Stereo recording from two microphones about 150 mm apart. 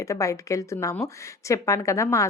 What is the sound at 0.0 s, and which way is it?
A woman's voice, 20° left (ahead or behind).